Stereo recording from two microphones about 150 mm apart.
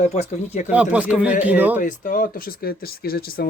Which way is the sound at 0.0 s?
45° left (ahead or behind).